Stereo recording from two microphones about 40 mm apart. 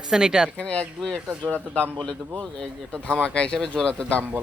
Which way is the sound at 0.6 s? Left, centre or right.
Left.